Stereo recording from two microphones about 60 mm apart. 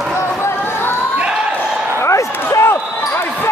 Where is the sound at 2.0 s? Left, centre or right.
Left.